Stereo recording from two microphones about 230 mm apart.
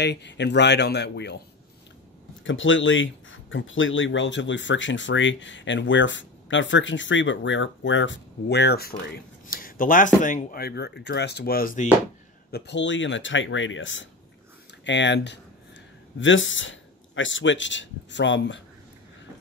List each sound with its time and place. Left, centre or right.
0.0 s speech: left
2.4 s speech: left
12.4 s speech: left